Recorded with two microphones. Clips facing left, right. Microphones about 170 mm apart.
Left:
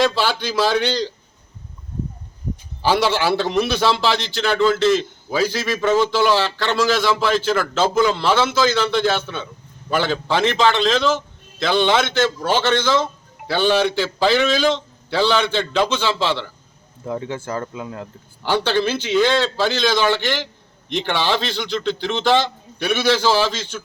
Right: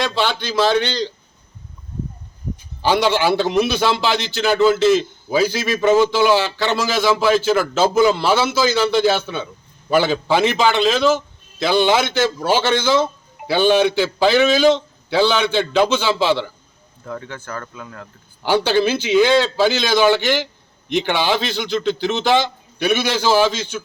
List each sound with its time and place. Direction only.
0.0 s a man's voice: 5° left (ahead or behind)
2.8 s a man's voice: 5° left (ahead or behind)
17.0 s speech: 25° left (ahead or behind)
18.4 s a man's voice: 10° right (ahead or behind)